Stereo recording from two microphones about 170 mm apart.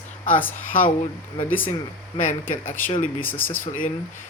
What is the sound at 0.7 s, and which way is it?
Speech, 55° left (ahead or behind).